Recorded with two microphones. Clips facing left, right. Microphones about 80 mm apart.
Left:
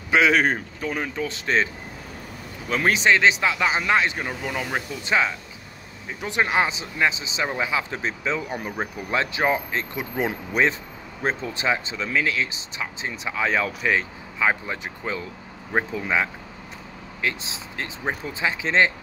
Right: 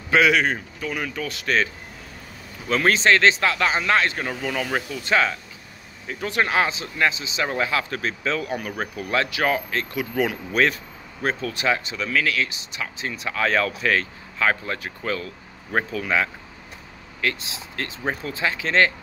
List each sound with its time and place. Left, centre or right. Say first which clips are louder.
0.3 s speech: left 1 dB; left
2.7 s speech: right 1 dB; centre
7.4 s speech: right 1 dB; centre